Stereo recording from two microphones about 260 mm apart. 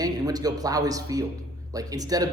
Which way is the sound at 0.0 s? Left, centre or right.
Centre.